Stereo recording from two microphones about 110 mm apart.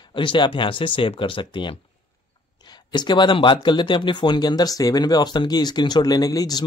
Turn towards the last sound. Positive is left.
turn(degrees=35)  # may be behind; listen again after turning